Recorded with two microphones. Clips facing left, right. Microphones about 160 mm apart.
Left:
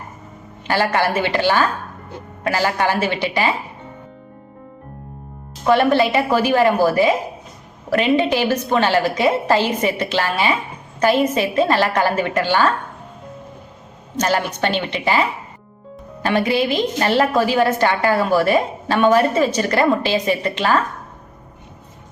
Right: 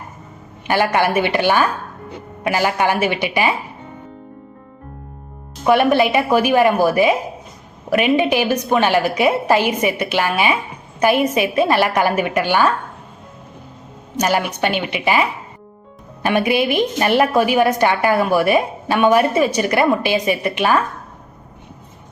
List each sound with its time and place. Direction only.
0.7 s a woman's voice: 15° right (ahead or behind)
5.6 s a woman's voice: 15° right (ahead or behind)
14.2 s a woman's voice: 15° right (ahead or behind)